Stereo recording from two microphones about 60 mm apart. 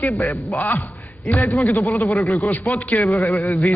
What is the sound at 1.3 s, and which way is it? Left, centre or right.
Speech, left.